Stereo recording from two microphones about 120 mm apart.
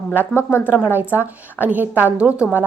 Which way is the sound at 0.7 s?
15° right (ahead or behind).